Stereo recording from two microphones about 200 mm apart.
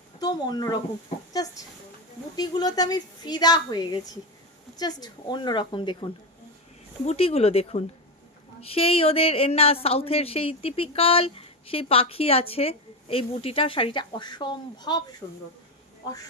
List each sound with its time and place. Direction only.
0.2 s a woman's voice: 20° left (ahead or behind)
7.1 s a woman's voice: 30° left (ahead or behind)